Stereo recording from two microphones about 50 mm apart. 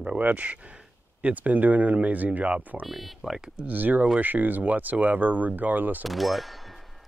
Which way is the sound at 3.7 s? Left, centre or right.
Right.